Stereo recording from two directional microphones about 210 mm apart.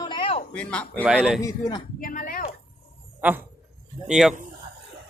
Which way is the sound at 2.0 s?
40° left (ahead or behind).